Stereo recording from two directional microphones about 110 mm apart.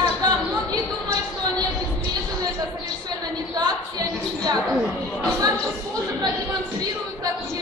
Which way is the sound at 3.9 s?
35° right (ahead or behind).